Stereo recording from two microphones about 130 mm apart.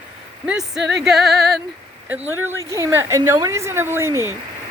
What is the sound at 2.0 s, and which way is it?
Speech, 20° right (ahead or behind).